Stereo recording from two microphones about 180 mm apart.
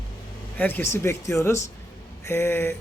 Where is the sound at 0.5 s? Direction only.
10° left (ahead or behind).